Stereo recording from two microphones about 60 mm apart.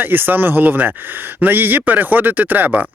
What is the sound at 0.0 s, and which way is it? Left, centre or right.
A man's voice, right.